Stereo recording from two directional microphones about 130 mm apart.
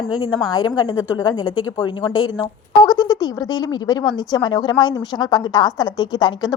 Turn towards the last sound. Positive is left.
turn(degrees=35)  # may be behind; listen again after turning